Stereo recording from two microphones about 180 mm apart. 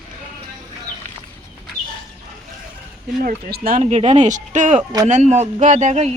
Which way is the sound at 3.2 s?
55° right (ahead or behind).